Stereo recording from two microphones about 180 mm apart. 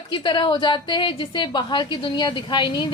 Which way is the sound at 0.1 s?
25° left (ahead or behind).